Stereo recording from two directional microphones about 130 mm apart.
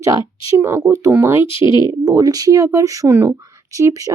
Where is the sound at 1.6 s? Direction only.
40° left (ahead or behind).